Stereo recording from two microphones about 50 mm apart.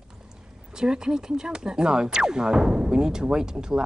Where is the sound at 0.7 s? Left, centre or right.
Centre.